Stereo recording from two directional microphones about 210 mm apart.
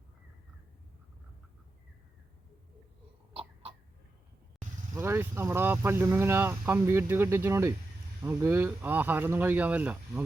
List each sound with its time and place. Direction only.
3.3 s cough: 25° right (ahead or behind)
4.9 s speech: 10° right (ahead or behind)